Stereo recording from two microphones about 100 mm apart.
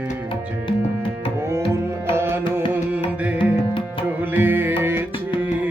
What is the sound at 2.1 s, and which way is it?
Music, 25° right (ahead or behind).